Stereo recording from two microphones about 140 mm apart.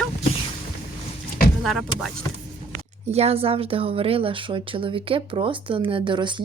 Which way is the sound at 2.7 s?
50° right (ahead or behind).